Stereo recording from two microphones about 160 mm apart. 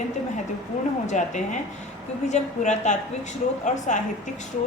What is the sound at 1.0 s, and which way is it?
A woman's voice, 50° left (ahead or behind).